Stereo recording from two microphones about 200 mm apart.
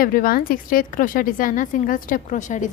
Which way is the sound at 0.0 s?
45° left (ahead or behind).